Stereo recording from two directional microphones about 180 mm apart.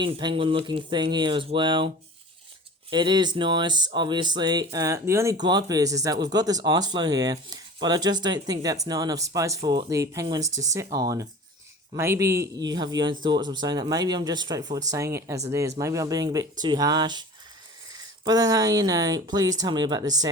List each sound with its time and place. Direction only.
0.0 s speech: 25° right (ahead or behind)
2.9 s speech: 25° right (ahead or behind)